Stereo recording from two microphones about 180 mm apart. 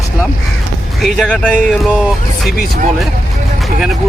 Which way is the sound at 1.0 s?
Centre (ahead or behind).